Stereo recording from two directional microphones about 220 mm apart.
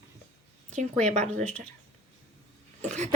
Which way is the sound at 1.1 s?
30° right (ahead or behind).